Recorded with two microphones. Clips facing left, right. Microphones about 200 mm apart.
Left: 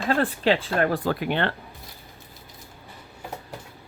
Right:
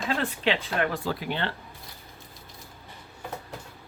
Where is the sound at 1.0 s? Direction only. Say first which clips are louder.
Left 5 dB; 60° left (ahead or behind).